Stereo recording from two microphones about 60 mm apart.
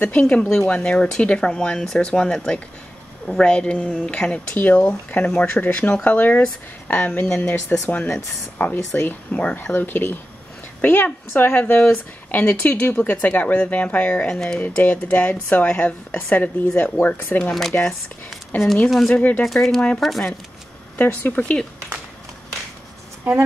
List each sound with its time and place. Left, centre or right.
0.0 s speech: left
0.4 s speech: centre
4.6 s speech: left
5.2 s speech: centre; by 9.4 s left
9.4 s a woman's voice: left
14.3 s speech: centre
14.6 s speech: left
17.5 s speech: centre
18.5 s speech: left
18.9 s speech: centre
19.1 s speech: left
19.4 s speech: centre
21.0 s speech: left